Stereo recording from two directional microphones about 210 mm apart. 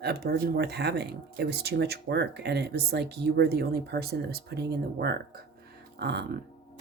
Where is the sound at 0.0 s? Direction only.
50° right (ahead or behind).